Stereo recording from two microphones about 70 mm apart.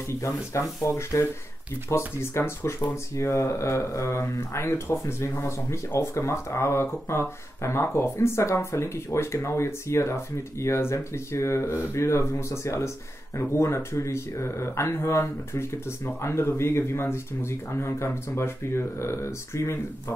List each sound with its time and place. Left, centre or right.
0.5 s speech: left